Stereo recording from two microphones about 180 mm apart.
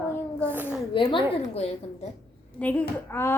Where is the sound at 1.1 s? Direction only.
35° left (ahead or behind).